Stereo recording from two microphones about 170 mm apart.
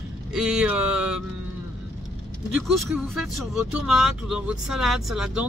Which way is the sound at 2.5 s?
Centre (ahead or behind).